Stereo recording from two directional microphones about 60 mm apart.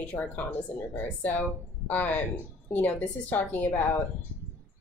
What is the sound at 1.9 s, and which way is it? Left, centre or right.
A woman's voice, left.